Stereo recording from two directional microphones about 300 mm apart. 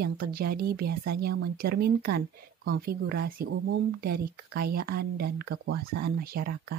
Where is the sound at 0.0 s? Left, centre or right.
Right.